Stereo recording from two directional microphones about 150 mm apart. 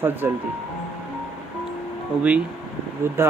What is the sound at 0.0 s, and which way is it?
Speech, 15° right (ahead or behind).